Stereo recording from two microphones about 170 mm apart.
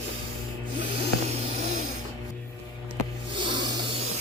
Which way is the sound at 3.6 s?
30° right (ahead or behind).